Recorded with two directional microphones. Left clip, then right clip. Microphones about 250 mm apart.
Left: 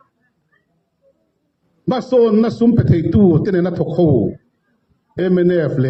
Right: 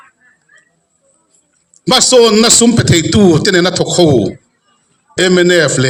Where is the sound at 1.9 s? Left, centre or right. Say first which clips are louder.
Right 7 dB; right.